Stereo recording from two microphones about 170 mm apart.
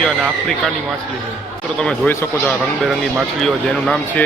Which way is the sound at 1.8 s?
5° left (ahead or behind).